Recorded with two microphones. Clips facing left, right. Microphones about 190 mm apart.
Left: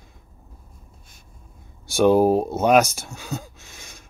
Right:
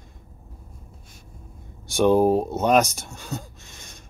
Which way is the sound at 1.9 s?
5° left (ahead or behind).